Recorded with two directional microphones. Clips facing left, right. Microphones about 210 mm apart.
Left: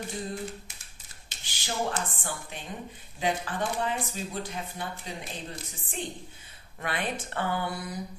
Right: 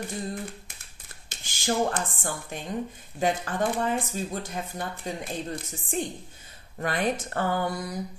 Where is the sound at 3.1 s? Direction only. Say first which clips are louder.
Right 3 dB; 45° right (ahead or behind).